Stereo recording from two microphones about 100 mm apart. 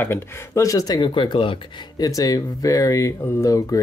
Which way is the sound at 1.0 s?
55° left (ahead or behind).